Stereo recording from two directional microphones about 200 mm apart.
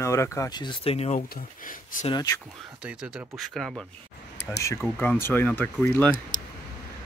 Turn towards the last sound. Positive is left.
turn(degrees=10)  # may be behind; listen again after turning